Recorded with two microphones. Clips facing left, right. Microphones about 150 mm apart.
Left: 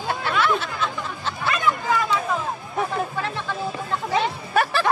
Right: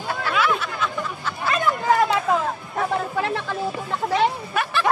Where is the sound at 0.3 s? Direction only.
5° right (ahead or behind).